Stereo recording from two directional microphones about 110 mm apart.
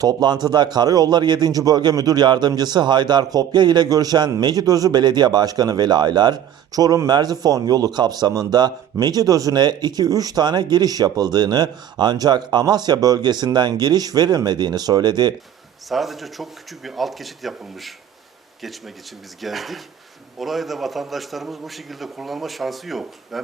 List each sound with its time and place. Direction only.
0.0 s a man's voice: 40° right (ahead or behind)
15.9 s a man's voice: centre (ahead or behind)
19.4 s a man's voice: centre (ahead or behind)